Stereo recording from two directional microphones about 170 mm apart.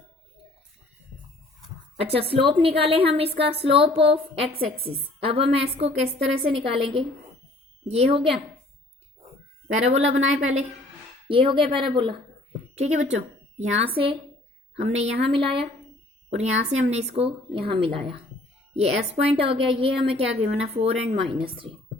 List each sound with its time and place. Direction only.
2.0 s a woman's voice: 35° right (ahead or behind)
9.9 s a woman's voice: 40° right (ahead or behind)
11.3 s speech: 30° right (ahead or behind)
12.7 s a woman's voice: 40° right (ahead or behind)